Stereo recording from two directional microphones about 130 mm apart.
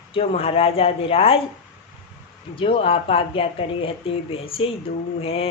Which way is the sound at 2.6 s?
45° left (ahead or behind).